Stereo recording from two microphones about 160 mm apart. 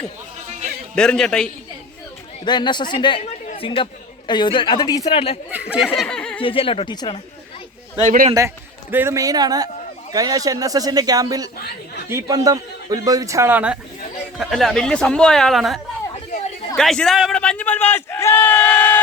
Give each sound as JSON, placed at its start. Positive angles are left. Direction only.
{"t": 0.9, "sound": "speech", "side_deg": 5}
{"t": 2.4, "sound": "speech", "side_deg": 30}
{"t": 5.5, "sound": "speech", "side_deg": -10}
{"t": 6.0, "sound": "a sound", "side_deg": 5}
{"t": 6.4, "sound": "speech", "side_deg": 35}
{"t": 8.0, "sound": "a man's voice", "side_deg": -55}
{"t": 8.3, "sound": "a man's voice", "side_deg": -20}
{"t": 14.3, "sound": "a man's voice", "side_deg": 0}